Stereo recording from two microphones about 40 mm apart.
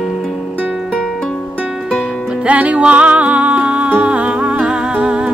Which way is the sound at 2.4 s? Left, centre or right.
Right.